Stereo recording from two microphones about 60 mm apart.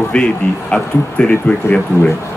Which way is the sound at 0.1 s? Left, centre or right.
Centre.